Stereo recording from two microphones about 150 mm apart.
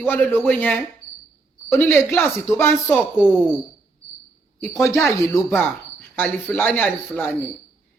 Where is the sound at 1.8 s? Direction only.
15° left (ahead or behind).